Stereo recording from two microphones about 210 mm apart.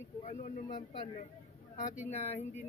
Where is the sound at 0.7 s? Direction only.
20° left (ahead or behind).